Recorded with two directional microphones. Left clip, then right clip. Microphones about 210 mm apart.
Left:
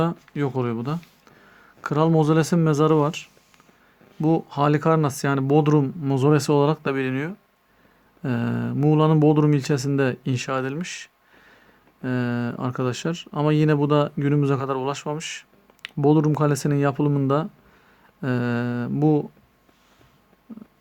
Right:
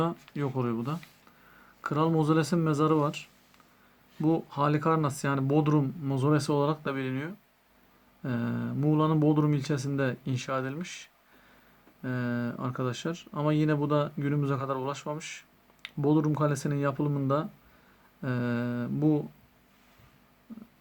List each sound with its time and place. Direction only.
0.0 s speech: 45° left (ahead or behind)